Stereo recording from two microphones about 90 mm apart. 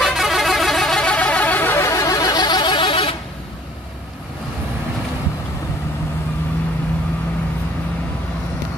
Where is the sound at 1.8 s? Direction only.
35° left (ahead or behind); by 3.1 s 80° left.